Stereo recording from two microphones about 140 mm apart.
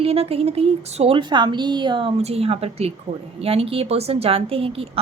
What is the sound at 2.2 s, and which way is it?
A woman's voice, 45° right (ahead or behind).